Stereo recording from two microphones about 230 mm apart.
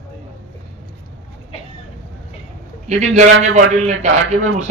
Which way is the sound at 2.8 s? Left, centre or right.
Right.